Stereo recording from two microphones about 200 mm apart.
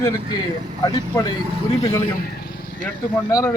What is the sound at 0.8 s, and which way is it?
Speech, 20° left (ahead or behind).